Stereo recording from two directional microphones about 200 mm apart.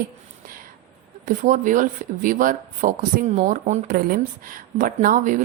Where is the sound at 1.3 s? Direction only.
40° right (ahead or behind).